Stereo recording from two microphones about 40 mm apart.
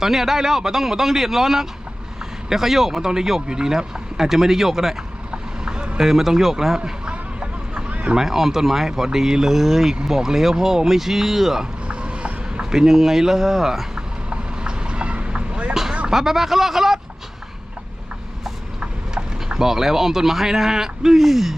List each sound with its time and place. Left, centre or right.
0.0 s speech: centre
5.3 s vehicle: right
6.0 s speech: centre
7.1 s a sound: right
8.1 s speech: centre
11.9 s a sound: right
12.7 s speech: centre
14.3 s vehicle: right
15.7 s a sound: centre
16.0 s speech: centre
19.1 s speech: centre